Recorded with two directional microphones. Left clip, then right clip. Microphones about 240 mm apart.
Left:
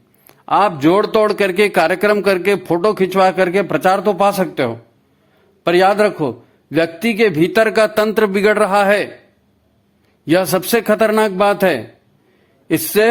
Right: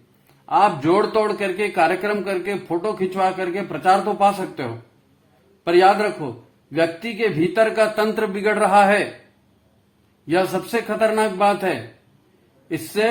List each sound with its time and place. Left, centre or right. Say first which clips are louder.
0.4 s a man's voice: left 4 dB; left
10.2 s a man's voice: left 6 dB; left